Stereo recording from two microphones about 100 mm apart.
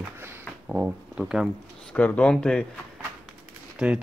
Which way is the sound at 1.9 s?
15° left (ahead or behind).